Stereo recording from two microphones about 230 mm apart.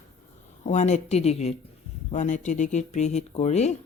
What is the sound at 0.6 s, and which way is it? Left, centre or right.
A woman's voice, left.